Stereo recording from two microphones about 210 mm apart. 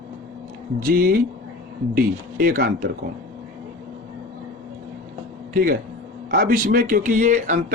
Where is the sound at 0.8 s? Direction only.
40° right (ahead or behind).